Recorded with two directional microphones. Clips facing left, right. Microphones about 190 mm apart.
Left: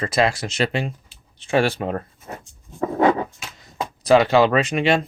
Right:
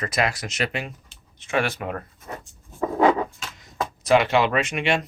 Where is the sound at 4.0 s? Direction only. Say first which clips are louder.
Left 4 dB; 35° left (ahead or behind).